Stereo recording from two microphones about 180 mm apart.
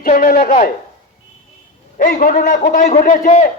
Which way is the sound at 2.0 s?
45° left (ahead or behind).